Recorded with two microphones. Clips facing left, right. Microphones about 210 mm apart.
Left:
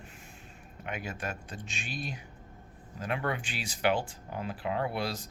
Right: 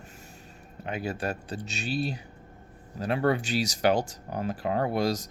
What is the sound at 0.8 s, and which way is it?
Speech, 35° right (ahead or behind).